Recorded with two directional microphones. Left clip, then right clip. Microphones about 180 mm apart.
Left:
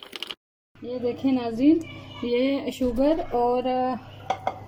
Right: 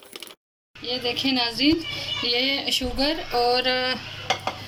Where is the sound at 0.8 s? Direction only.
45° left (ahead or behind).